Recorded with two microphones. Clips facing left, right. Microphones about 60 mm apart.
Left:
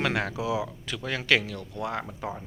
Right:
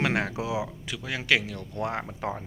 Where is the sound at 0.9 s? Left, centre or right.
Centre.